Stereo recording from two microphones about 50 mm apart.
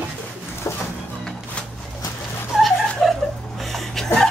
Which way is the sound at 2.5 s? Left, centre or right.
Centre.